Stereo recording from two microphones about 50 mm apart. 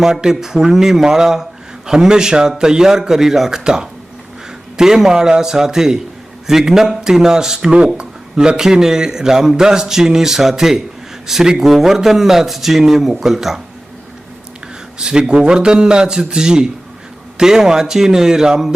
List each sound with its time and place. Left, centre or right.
0.0 s a man's voice: centre
14.9 s a man's voice: centre